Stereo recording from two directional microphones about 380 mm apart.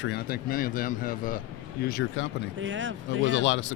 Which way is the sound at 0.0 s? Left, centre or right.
Left.